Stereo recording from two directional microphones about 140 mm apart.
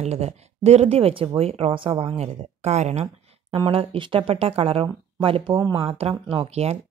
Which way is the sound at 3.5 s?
40° right (ahead or behind).